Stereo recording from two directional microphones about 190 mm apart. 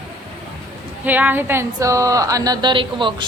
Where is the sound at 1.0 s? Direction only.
10° right (ahead or behind).